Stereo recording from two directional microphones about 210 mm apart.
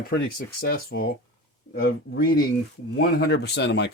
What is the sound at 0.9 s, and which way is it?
Speech, 50° left (ahead or behind).